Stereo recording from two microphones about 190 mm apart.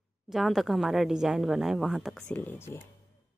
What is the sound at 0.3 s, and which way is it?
A woman's voice, centre (ahead or behind).